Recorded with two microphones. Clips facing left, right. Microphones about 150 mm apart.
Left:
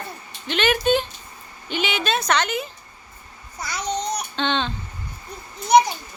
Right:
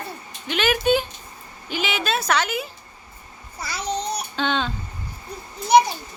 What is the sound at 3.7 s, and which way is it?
Babbling, 30° right (ahead or behind).